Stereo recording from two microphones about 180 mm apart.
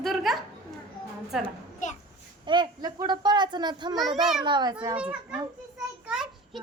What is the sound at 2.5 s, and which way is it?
A child's voice, 25° right (ahead or behind).